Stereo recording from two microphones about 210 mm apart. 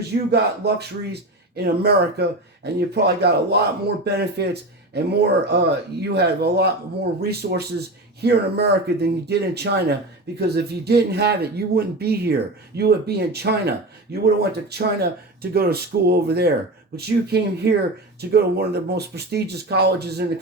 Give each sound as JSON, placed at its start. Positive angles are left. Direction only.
{"t": 0.3, "sound": "speech", "side_deg": -50}